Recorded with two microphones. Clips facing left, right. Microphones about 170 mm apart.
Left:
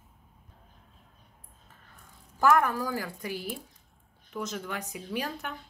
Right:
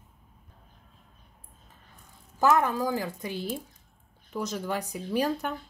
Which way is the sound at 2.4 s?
20° right (ahead or behind).